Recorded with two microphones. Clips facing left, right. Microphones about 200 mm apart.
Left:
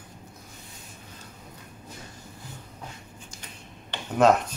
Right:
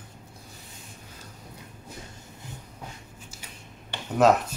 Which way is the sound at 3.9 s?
5° right (ahead or behind).